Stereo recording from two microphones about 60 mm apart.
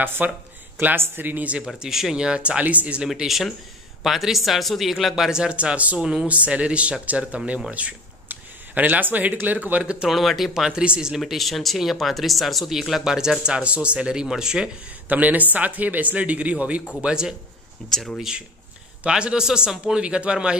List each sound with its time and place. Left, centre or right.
0.0 s speech: right
1.8 s speech: centre
3.1 s speech: centre; by 5.9 s right
5.9 s speech: centre
6.2 s speech: right
10.0 s speech: centre
11.1 s speech: centre
15.0 s speech: right
17.8 s speech: centre
19.0 s speech: centre